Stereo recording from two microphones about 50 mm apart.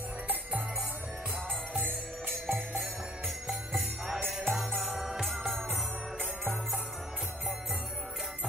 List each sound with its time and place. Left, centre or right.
0.3 s music: right
3.4 s jingle bell: centre
4.3 s music: centre